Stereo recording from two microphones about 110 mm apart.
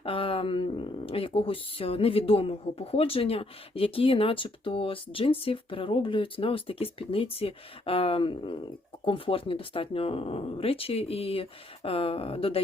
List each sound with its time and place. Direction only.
0.0 s speech: 55° left (ahead or behind)